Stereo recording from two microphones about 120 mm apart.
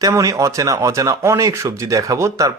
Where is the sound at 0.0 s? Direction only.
30° right (ahead or behind).